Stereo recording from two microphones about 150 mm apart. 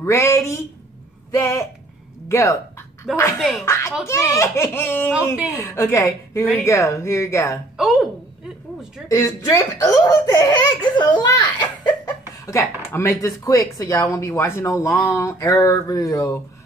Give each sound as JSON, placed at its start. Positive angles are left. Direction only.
{"t": 0.0, "sound": "speech", "side_deg": 20}
{"t": 3.3, "sound": "a woman's voice", "side_deg": 0}
{"t": 3.6, "sound": "speech", "side_deg": 15}
{"t": 7.7, "sound": "a woman's voice", "side_deg": 0}
{"t": 9.1, "sound": "speech", "side_deg": 20}